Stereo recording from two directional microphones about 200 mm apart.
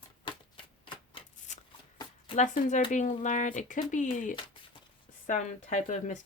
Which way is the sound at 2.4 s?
35° left (ahead or behind).